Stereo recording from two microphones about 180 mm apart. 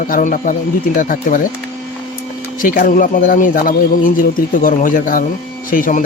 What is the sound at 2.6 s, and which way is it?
Speech, 50° left (ahead or behind).